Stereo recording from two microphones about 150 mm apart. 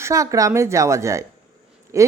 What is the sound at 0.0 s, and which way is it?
A woman's voice, 20° right (ahead or behind).